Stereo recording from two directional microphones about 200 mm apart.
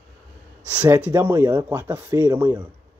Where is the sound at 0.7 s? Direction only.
5° right (ahead or behind).